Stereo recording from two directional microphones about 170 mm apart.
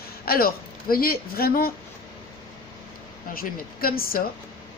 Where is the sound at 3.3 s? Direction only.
60° left (ahead or behind).